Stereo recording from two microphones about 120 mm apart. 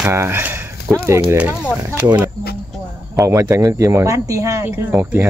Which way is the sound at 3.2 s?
25° right (ahead or behind).